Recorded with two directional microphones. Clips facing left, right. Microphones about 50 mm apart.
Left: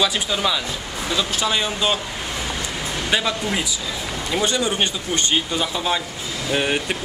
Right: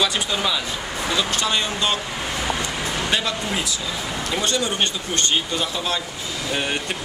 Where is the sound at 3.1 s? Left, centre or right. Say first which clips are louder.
Left 4 dB; centre.